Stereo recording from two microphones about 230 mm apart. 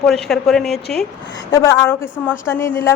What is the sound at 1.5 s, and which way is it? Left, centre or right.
A woman's voice, centre.